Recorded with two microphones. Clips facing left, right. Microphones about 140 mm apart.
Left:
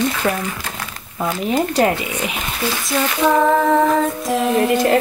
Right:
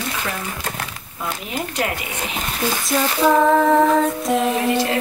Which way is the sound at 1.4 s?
35° left (ahead or behind).